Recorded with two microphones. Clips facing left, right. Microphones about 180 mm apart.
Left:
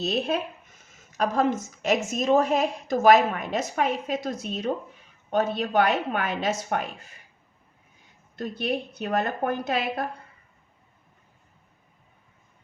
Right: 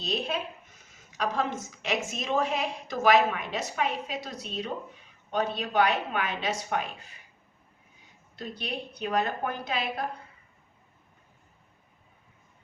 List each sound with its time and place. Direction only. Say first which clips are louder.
0.0 s a woman's voice: left 5 dB; 45° left (ahead or behind)
8.4 s a woman's voice: left 7 dB; 50° left (ahead or behind)